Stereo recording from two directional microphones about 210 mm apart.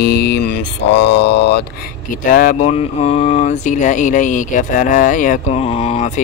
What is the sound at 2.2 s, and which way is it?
Speech, 40° left (ahead or behind).